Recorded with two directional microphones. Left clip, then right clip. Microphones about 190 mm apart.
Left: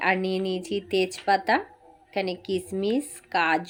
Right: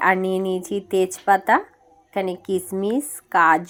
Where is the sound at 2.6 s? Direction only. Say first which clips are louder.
Right 3 dB; 5° left (ahead or behind).